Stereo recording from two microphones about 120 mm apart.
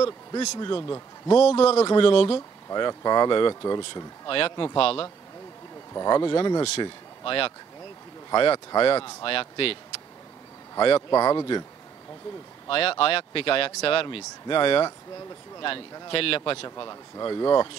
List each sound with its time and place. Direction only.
0.6 s speech: 40° left (ahead or behind)
0.8 s a man's voice: 25° left (ahead or behind)
1.4 s a man's voice: 60° left (ahead or behind)
1.9 s speech: 45° left (ahead or behind)
2.7 s speech: 35° left (ahead or behind); by 5.0 s 50° left (ahead or behind)
5.9 s speech: 35° left (ahead or behind)
6.8 s speech: 50° left (ahead or behind)
11.0 s speech: 30° left (ahead or behind)
12.6 s speech: 50° left (ahead or behind)
16.1 s speech: 50° left (ahead or behind)
16.6 s speech: 30° left (ahead or behind)